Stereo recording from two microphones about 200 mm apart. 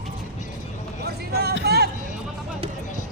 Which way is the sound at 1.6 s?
55° right (ahead or behind).